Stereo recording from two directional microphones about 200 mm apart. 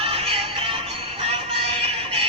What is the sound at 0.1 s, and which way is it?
Music, 30° right (ahead or behind).